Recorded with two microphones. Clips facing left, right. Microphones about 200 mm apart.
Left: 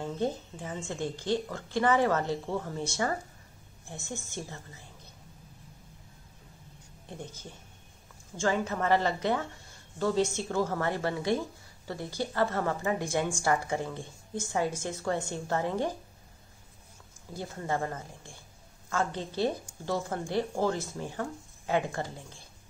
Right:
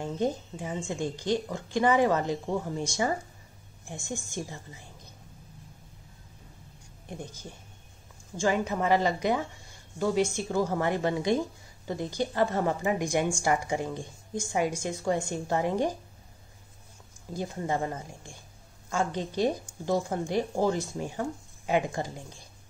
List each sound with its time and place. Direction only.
0.0 s a woman's voice: 15° right (ahead or behind)
7.1 s a woman's voice: 10° right (ahead or behind)
17.3 s a woman's voice: 15° right (ahead or behind)